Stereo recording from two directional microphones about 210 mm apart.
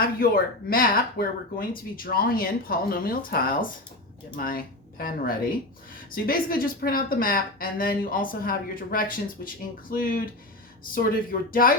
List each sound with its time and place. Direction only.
0.0 s speech: 45° left (ahead or behind)